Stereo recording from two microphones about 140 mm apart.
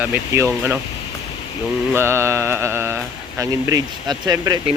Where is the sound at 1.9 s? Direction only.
20° right (ahead or behind).